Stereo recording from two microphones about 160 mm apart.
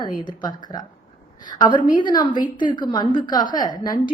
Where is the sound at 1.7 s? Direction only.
55° left (ahead or behind).